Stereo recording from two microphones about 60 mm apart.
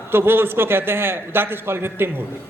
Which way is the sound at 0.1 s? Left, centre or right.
Right.